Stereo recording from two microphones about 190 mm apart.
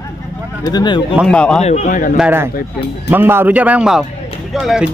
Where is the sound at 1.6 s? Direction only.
35° left (ahead or behind).